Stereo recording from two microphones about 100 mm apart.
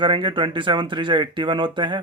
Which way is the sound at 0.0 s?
55° right (ahead or behind).